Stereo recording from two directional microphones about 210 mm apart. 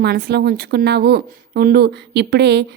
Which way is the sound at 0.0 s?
50° right (ahead or behind).